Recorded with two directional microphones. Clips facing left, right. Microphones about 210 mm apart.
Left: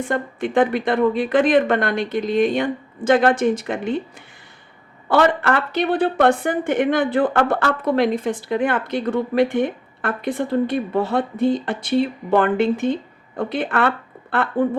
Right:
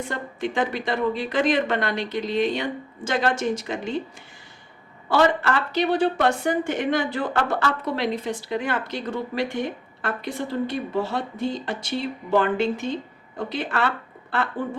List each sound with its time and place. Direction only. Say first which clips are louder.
0.1 s a woman's voice: left 7 dB; 55° left (ahead or behind)
5.0 s a woman's voice: left 3 dB; 55° left (ahead or behind)